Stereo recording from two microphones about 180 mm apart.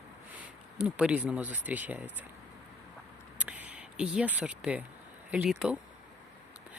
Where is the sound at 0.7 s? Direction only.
5° right (ahead or behind).